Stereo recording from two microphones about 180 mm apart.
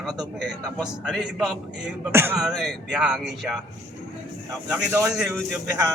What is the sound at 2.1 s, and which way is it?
Speech, 10° right (ahead or behind).